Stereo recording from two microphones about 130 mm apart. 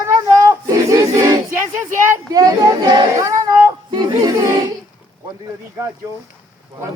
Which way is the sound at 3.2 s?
30° right (ahead or behind).